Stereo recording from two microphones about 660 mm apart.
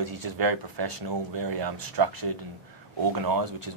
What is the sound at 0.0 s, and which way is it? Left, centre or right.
Speech, right.